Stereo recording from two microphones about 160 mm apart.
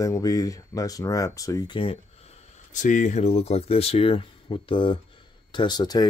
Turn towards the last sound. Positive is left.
turn(degrees=25)  # may be behind; listen again after turning